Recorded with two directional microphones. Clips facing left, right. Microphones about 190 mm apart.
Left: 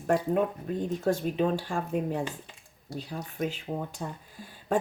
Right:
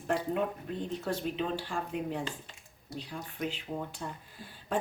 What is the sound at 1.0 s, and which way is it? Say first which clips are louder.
Speech: left 9 dB; 45° left (ahead or behind).